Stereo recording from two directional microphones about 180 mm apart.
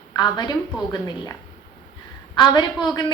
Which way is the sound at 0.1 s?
25° left (ahead or behind).